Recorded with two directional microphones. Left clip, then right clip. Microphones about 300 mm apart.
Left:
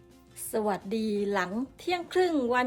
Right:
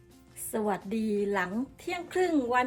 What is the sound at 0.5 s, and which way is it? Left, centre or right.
A woman's voice, centre.